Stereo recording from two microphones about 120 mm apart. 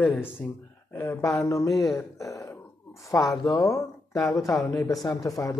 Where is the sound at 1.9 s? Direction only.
25° left (ahead or behind).